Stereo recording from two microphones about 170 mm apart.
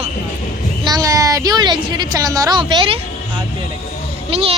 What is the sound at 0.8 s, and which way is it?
A woman's voice, 20° right (ahead or behind).